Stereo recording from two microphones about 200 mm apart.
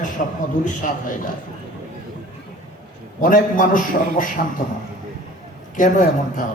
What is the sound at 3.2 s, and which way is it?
A man's voice, 40° left (ahead or behind).